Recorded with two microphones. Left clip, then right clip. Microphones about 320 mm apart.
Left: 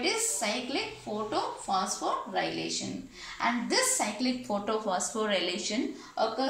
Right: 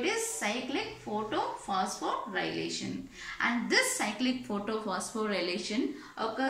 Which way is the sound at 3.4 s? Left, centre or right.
Centre.